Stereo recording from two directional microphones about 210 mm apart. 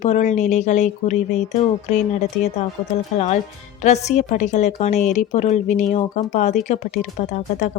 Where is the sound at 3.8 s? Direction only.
35° left (ahead or behind).